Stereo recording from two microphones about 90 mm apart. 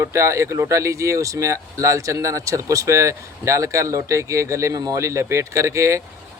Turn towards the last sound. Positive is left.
turn(degrees=-35)  # may be behind; listen again after turning